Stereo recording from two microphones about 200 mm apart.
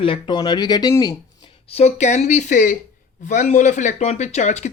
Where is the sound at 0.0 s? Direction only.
25° left (ahead or behind).